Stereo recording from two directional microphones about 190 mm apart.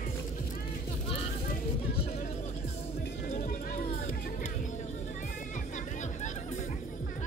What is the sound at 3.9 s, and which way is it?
Music, 35° left (ahead or behind).